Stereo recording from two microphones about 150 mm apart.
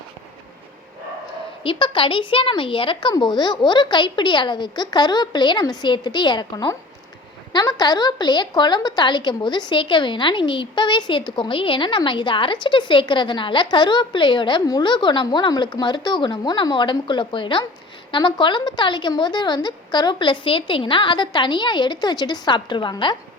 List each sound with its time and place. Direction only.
1.6 s a woman's voice: 35° left (ahead or behind)